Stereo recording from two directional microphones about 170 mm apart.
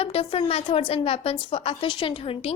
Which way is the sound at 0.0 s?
35° left (ahead or behind).